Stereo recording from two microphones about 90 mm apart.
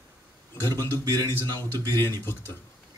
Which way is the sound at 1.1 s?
45° right (ahead or behind).